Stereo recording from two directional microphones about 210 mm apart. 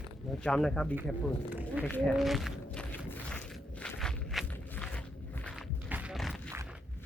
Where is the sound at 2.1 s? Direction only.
Centre (ahead or behind).